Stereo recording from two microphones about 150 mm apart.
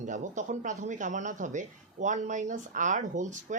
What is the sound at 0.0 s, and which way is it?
A woman's voice, 55° right (ahead or behind).